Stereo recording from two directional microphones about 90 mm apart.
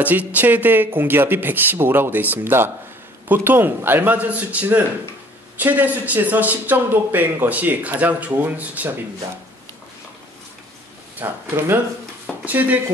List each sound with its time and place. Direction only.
0.0 s speech: 15° right (ahead or behind)
11.2 s speech: 25° right (ahead or behind)
12.4 s speech: 20° right (ahead or behind)